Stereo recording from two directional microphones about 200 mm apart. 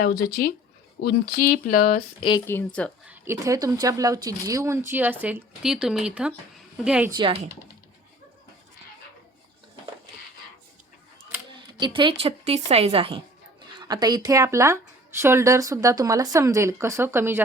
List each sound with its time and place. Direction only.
0.0 s speech: 50° left (ahead or behind)
2.5 s speech: 10° left (ahead or behind)
3.1 s speech: 15° right (ahead or behind)
7.2 s a woman's voice: 25° right (ahead or behind)
11.8 s a woman's voice: 25° right (ahead or behind)